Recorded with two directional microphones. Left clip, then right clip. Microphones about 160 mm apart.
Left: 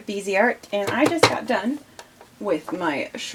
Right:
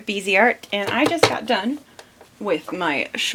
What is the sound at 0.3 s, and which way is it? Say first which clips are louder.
Speech: right 3 dB; 20° right (ahead or behind).